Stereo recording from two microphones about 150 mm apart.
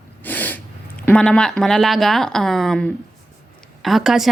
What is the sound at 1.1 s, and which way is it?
Speech, 5° left (ahead or behind).